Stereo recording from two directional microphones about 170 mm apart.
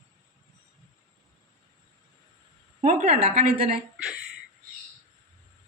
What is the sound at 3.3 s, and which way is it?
Speech, 60° right (ahead or behind).